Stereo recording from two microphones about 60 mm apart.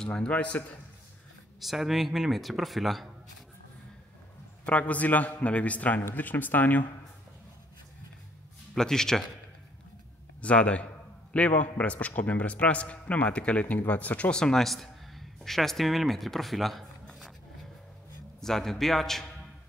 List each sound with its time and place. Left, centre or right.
0.0 s speech: centre
1.6 s speech: centre
4.6 s speech: left
8.7 s speech: centre
10.4 s speech: centre
14.3 s a man's voice: centre
18.4 s speech: centre